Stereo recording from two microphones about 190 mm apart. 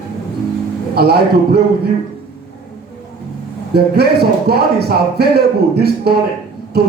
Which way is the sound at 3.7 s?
55° right (ahead or behind).